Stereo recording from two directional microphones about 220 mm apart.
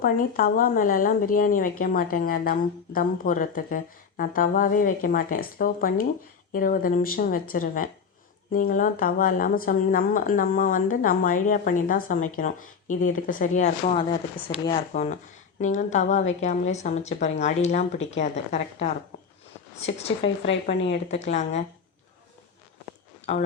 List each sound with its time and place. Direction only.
0.0 s speech: 40° left (ahead or behind)